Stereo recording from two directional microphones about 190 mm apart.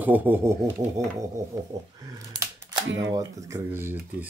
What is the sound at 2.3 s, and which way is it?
Typewriter, 20° right (ahead or behind).